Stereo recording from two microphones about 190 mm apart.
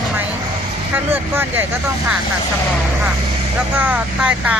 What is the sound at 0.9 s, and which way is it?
Speech, 10° right (ahead or behind).